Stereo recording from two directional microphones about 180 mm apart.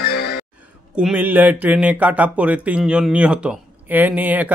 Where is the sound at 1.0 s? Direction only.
5° right (ahead or behind).